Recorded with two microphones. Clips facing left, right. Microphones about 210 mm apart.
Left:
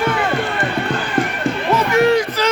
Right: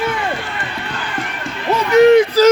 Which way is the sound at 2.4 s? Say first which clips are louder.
Right 9 dB; 40° right (ahead or behind).